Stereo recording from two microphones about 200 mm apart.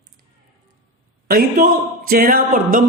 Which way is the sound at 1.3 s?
45° right (ahead or behind).